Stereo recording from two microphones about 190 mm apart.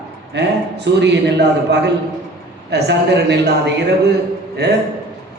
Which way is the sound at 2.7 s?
65° right (ahead or behind).